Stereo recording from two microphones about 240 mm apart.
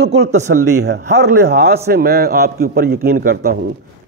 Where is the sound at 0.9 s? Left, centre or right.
Right.